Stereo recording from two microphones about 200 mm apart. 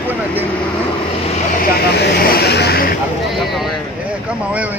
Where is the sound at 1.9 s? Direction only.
55° left (ahead or behind).